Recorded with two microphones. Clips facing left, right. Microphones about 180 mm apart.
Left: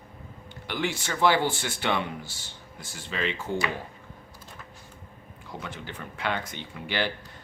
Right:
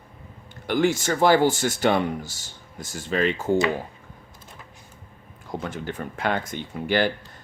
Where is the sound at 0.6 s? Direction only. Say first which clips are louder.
Right 9 dB; 45° right (ahead or behind).